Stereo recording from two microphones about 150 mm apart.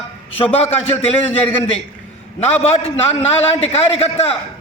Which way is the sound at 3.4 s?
45° left (ahead or behind).